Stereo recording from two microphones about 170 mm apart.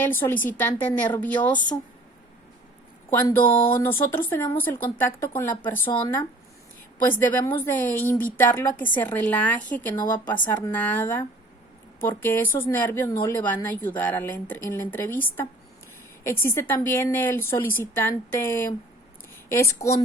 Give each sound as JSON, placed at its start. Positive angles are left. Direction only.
{"t": 0.0, "sound": "speech", "side_deg": 10}
{"t": 3.1, "sound": "speech", "side_deg": 10}